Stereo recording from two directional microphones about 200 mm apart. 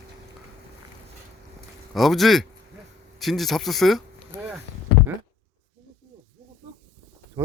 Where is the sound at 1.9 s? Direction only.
Centre (ahead or behind).